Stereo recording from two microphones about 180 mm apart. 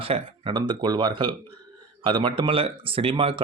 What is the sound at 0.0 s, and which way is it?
Speech, 30° right (ahead or behind).